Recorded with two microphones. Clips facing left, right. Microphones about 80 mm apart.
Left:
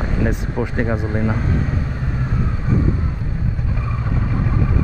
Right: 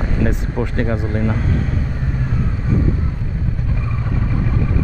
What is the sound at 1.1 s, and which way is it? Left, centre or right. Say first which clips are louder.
Speech: even; centre.